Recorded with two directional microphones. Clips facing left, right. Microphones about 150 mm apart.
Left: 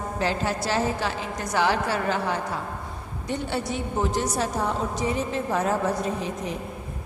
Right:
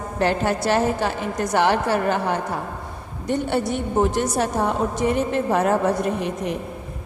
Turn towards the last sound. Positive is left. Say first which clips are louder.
# right 5 dB
turn(degrees=-65)  # may be behind; listen again after turning